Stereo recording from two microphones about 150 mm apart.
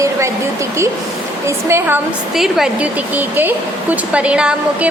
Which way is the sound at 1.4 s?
15° right (ahead or behind).